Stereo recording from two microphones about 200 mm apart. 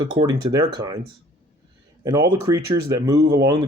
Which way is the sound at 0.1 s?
20° right (ahead or behind).